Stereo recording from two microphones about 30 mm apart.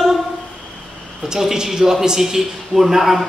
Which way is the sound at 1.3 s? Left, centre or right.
Centre.